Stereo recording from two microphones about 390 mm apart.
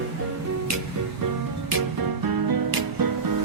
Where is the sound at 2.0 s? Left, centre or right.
Right.